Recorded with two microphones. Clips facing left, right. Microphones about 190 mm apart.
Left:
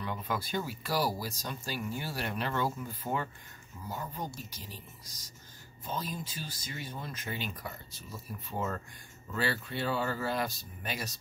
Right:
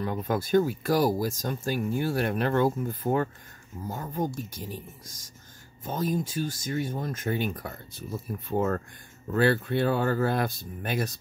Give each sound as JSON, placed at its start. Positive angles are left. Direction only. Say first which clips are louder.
{"t": 0.0, "sound": "speech", "louder": "right 7 dB", "side_deg": -45}